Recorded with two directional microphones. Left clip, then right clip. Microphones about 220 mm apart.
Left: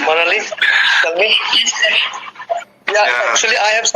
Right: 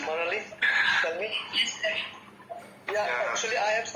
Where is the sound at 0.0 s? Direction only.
45° left (ahead or behind).